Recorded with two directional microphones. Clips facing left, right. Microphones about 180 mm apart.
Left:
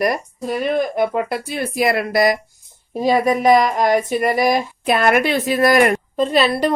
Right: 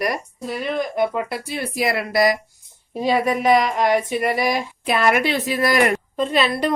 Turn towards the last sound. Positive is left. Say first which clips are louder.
# left 3 dB
turn(degrees=35)  # may be behind; listen again after turning